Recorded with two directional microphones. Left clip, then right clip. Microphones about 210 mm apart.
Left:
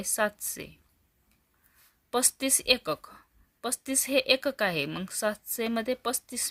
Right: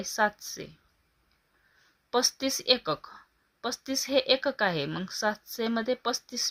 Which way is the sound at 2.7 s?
35° left (ahead or behind).